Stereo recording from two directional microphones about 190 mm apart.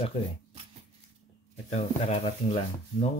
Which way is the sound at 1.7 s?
35° left (ahead or behind).